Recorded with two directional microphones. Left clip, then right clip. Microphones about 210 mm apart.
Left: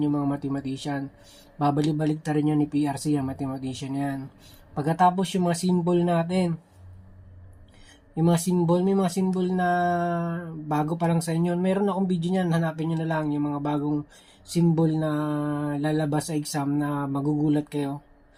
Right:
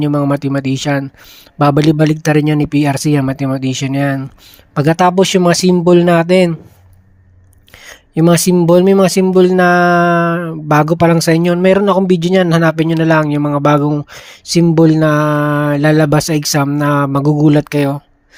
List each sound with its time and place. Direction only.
0.0 s speech: 45° right (ahead or behind)
8.1 s speech: 50° right (ahead or behind)